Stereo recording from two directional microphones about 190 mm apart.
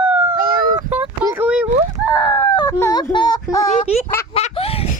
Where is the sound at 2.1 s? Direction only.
15° left (ahead or behind).